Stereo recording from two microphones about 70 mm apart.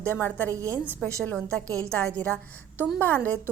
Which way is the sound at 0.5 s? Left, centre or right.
Right.